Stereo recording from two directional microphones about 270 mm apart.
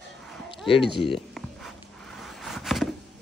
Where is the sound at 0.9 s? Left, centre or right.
Centre.